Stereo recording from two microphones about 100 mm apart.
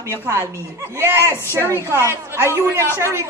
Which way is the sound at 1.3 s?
25° left (ahead or behind).